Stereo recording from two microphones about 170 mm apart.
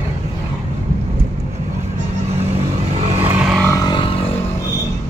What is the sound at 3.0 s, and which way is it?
Vehicle, 40° right (ahead or behind).